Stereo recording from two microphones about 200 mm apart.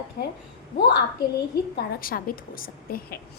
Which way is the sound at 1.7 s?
45° left (ahead or behind).